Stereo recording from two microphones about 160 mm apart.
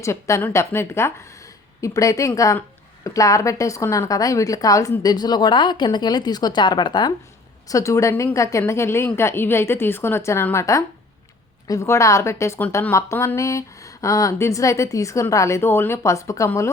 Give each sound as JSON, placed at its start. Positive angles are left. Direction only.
{"t": 0.0, "sound": "a woman's voice", "side_deg": 20}